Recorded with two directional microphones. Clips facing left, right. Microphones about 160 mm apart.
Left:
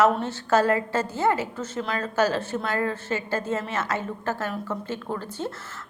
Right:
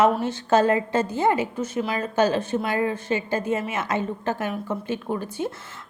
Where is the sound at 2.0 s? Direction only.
20° right (ahead or behind).